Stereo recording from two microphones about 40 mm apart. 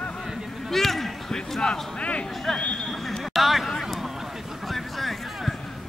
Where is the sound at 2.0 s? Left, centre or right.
Left.